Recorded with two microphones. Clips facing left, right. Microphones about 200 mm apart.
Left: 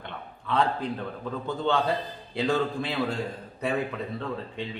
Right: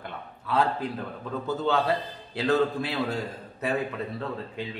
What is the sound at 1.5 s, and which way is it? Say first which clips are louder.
Speech: right 1 dB; 5° right (ahead or behind).